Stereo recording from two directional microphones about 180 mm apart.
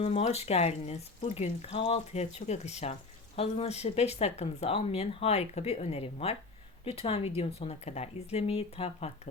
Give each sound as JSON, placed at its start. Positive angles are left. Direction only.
{"t": 0.0, "sound": "speech", "side_deg": 35}